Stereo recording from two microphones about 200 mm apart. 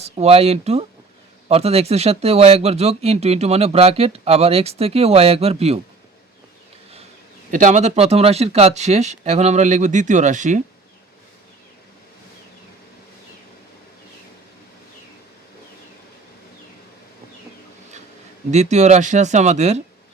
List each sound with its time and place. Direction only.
0.0 s speech: 30° right (ahead or behind)
7.5 s speech: 40° right (ahead or behind)
18.5 s speech: 35° right (ahead or behind)